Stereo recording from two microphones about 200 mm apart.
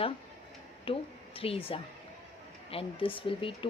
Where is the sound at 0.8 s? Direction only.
25° left (ahead or behind).